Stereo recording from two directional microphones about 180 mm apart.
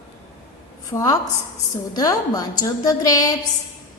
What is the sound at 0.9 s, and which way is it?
A woman's voice, 20° left (ahead or behind).